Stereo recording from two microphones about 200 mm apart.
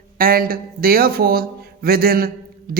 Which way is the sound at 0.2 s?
50° right (ahead or behind).